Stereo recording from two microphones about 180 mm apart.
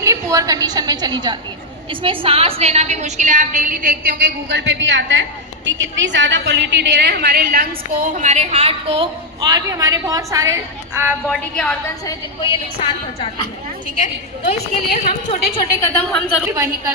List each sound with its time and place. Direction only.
0.0 s a woman's voice: 15° right (ahead or behind)
11.3 s a woman's voice: 5° left (ahead or behind)
12.0 s a woman's voice: 25° left (ahead or behind); by 15.4 s 40° left (ahead or behind)
15.8 s a woman's voice: 15° left (ahead or behind)